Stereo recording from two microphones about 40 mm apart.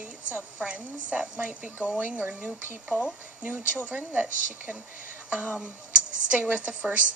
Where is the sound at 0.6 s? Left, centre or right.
Right.